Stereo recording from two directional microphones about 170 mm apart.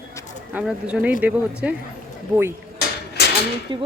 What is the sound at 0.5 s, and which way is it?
Speech, 5° right (ahead or behind).